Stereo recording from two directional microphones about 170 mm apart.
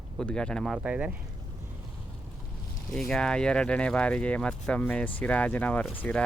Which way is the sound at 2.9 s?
Centre (ahead or behind).